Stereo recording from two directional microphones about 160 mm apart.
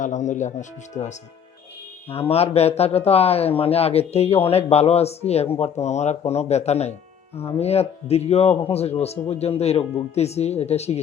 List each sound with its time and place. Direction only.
0.0 s speech: 50° left (ahead or behind)
2.3 s a man's voice: 40° left (ahead or behind)